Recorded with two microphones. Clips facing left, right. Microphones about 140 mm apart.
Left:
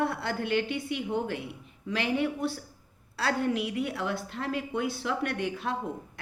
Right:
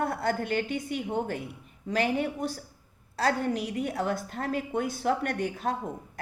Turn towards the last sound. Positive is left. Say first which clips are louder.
# right 2 dB
turn(degrees=-45)  # may be behind; listen again after turning